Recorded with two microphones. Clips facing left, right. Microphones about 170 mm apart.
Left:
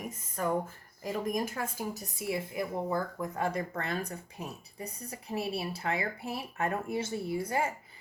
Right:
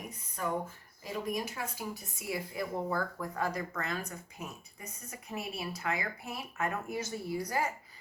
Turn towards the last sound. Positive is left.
turn(degrees=25)  # may be behind; listen again after turning